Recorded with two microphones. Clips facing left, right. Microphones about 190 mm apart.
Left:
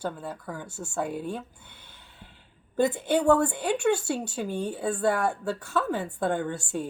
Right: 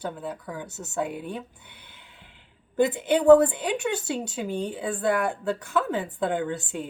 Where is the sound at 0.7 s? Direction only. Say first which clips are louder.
Right 1 dB; 20° right (ahead or behind).